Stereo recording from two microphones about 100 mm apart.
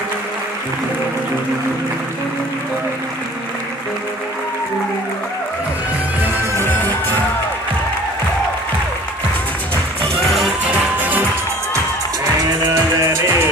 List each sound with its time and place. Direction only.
6.5 s music: 20° left (ahead or behind)
10.7 s music: 15° right (ahead or behind)
12.7 s music: 25° right (ahead or behind)